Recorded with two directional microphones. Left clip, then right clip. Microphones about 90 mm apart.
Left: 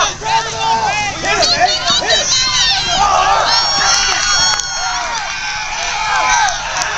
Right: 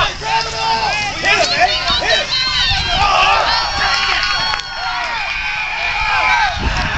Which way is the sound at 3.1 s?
Centre (ahead or behind).